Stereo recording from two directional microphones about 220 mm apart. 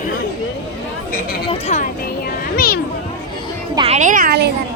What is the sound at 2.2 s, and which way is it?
Music, 40° left (ahead or behind).